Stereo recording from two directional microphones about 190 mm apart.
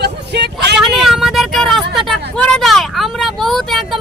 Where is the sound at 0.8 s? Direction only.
Centre (ahead or behind).